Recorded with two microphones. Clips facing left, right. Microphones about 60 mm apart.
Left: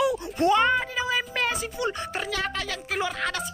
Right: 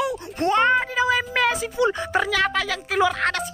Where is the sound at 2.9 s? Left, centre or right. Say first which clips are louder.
Right 7 dB; right.